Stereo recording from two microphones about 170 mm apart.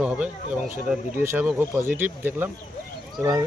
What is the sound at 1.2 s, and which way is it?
Speech, 15° right (ahead or behind).